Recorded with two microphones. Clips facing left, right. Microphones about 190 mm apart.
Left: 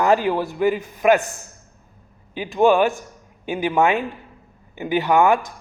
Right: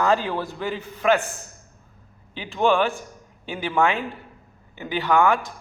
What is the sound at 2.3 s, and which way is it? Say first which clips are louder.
A man's voice: left 5 dB; 15° left (ahead or behind).